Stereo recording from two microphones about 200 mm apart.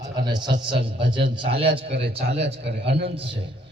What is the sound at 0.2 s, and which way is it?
A man's voice, 20° right (ahead or behind).